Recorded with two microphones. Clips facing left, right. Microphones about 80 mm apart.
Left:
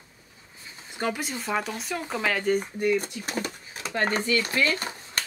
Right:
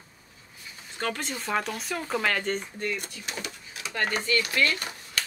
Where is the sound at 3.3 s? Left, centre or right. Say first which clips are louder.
Left 5 dB; left.